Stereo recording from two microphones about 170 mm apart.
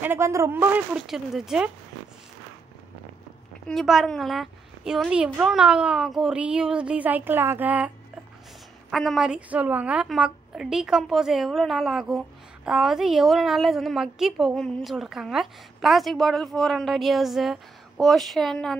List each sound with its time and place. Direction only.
0.0 s speech: 15° right (ahead or behind)
3.6 s a woman's voice: centre (ahead or behind)
8.9 s a woman's voice: centre (ahead or behind)